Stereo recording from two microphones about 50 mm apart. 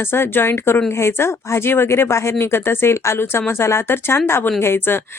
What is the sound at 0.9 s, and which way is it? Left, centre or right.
Speech, left.